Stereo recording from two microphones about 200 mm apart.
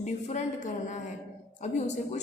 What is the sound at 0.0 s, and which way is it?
A woman's voice, 35° left (ahead or behind).